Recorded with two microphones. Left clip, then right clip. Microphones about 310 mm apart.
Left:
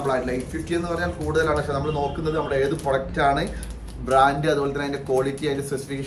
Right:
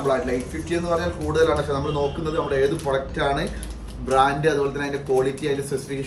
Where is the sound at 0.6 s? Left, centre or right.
Centre.